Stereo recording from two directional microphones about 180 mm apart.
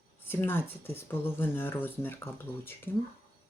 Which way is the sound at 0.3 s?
10° left (ahead or behind).